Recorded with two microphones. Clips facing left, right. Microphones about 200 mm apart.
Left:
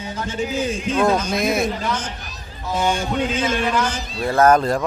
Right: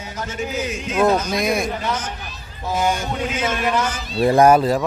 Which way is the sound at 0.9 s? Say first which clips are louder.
Right 2 dB; 5° right (ahead or behind).